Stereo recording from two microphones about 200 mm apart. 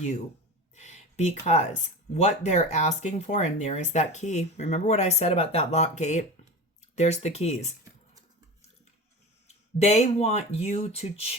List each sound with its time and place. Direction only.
0.8 s speech: 35° left (ahead or behind)
9.7 s speech: 35° left (ahead or behind)